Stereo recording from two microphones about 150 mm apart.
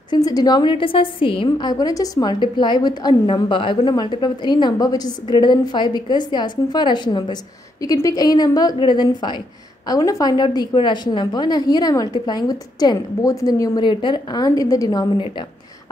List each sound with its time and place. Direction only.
0.1 s a woman's voice: 25° left (ahead or behind)